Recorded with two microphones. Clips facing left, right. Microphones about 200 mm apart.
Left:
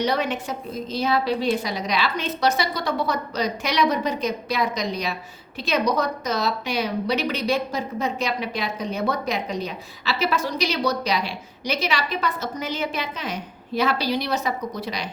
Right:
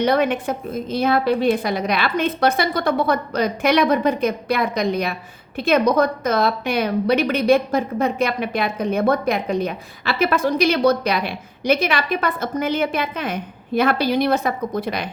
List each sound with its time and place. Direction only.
0.0 s a woman's voice: 55° right (ahead or behind)